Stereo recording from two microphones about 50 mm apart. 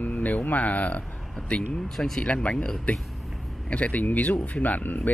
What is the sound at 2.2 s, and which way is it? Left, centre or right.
Speech, left.